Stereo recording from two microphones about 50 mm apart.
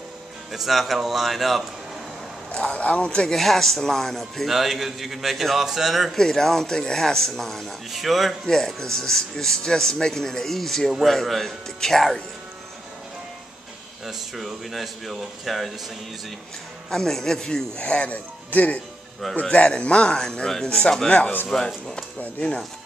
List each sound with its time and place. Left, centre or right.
0.5 s speech: centre
2.5 s speech: left
3.3 s speech: centre
4.5 s speech: centre
6.1 s speech: centre
8.5 s speech: centre
14.0 s speech: centre
16.9 s speech: centre